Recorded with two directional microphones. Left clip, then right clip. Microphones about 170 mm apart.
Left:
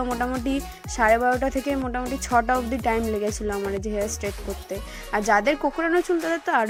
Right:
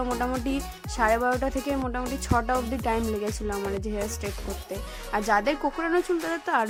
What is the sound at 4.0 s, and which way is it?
Music, centre (ahead or behind).